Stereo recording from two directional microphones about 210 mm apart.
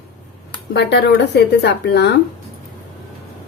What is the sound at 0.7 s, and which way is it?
Speech, 55° left (ahead or behind).